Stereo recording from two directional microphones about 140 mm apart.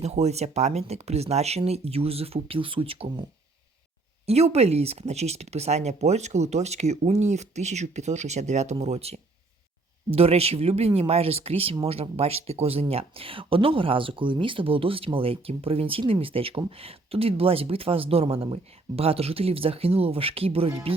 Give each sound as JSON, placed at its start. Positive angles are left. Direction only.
{"t": 0.0, "sound": "speech", "side_deg": -50}
{"t": 4.3, "sound": "speech", "side_deg": -50}
{"t": 10.2, "sound": "speech", "side_deg": -45}